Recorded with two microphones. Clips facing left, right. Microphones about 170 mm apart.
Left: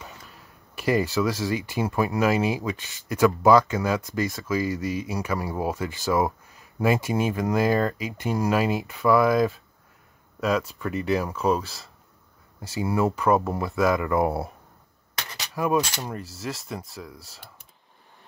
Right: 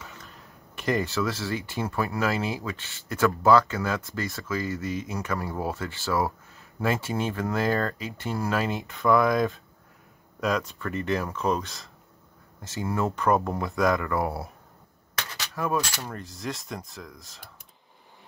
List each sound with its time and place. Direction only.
0.7 s speech: 10° left (ahead or behind)
14.0 s speech: 20° left (ahead or behind)
15.3 s a sound: 15° left (ahead or behind)
15.8 s speech: 20° left (ahead or behind)
16.2 s speech: 5° left (ahead or behind)